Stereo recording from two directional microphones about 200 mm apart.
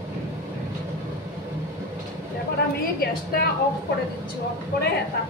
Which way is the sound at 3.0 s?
50° left (ahead or behind).